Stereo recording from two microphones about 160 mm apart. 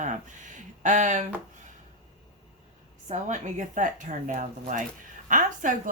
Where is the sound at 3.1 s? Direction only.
50° right (ahead or behind).